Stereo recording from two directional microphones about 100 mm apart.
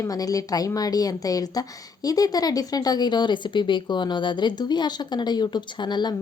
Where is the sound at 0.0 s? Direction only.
35° left (ahead or behind).